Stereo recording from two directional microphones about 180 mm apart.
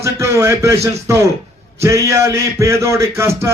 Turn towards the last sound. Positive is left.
turn(degrees=-15)  # may be behind; listen again after turning